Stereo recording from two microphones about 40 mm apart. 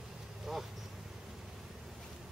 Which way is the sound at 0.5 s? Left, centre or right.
Centre.